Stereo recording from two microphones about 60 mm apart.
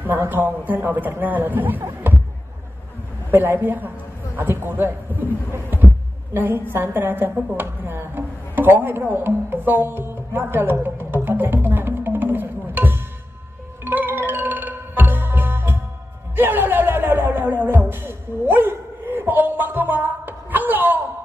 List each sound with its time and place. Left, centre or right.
0.2 s a man's voice: right
3.3 s a man's voice: right
11.2 s music: right
16.3 s a sound: right